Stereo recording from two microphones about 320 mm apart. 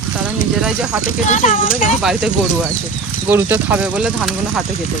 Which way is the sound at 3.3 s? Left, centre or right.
Centre.